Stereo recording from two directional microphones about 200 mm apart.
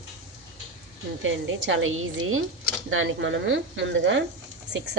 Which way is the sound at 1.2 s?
70° right (ahead or behind).